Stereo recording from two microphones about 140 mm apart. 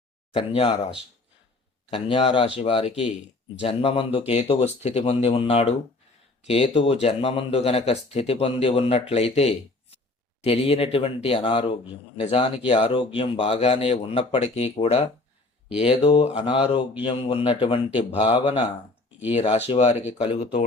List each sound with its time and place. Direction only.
0.3 s speech: 40° left (ahead or behind)
1.9 s speech: 35° left (ahead or behind)